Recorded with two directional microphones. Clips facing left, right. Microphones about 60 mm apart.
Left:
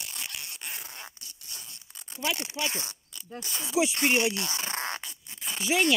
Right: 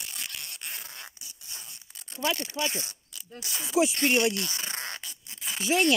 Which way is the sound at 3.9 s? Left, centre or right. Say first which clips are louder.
Right 1 dB; centre.